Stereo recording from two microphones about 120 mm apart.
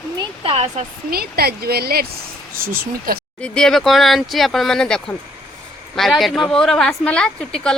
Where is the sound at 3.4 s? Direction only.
5° left (ahead or behind).